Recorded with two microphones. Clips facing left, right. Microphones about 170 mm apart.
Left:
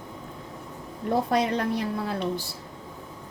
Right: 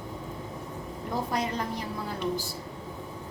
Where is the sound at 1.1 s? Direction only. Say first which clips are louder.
Left 7 dB; 65° left (ahead or behind).